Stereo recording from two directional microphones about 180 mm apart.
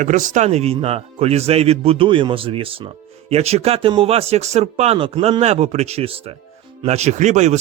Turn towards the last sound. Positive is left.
turn(degrees=-40)  # may be behind; listen again after turning